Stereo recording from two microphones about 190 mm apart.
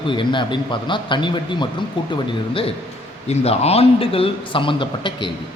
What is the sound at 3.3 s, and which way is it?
A man's voice, 35° left (ahead or behind).